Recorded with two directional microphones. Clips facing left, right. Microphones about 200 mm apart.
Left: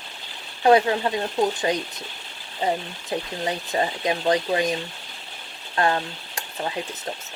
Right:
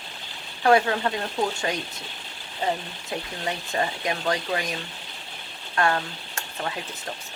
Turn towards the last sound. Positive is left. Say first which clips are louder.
# left 3 dB
turn(degrees=20)  # may be behind; listen again after turning